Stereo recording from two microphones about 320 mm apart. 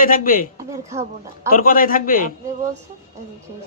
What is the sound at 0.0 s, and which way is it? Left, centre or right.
Speech, left.